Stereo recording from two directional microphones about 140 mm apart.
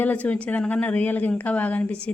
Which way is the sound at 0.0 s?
10° left (ahead or behind).